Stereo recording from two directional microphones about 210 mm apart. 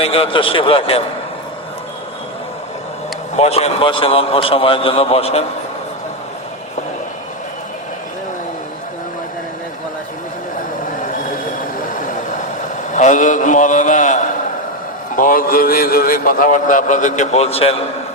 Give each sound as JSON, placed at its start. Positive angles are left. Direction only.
{"t": 0.0, "sound": "a man's voice", "side_deg": 25}
{"t": 3.3, "sound": "a man's voice", "side_deg": 30}
{"t": 12.9, "sound": "a man's voice", "side_deg": 35}